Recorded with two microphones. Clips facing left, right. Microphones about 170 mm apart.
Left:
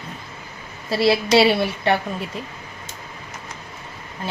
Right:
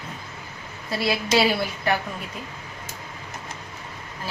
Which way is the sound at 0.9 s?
30° left (ahead or behind).